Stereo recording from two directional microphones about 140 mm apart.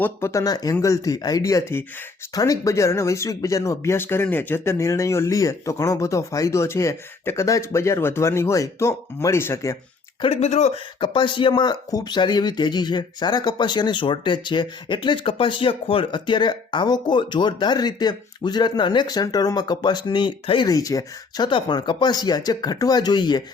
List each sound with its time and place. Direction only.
0.0 s speech: 20° left (ahead or behind)
10.2 s speech: 45° left (ahead or behind)
11.0 s speech: 35° left (ahead or behind)